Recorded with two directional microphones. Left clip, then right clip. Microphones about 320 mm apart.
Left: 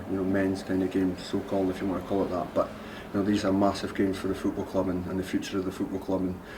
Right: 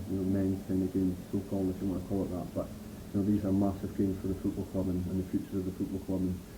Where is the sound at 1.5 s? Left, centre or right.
Centre.